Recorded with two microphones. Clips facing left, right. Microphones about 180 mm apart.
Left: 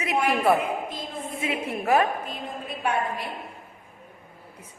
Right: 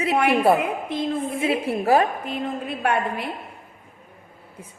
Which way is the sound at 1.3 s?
30° right (ahead or behind).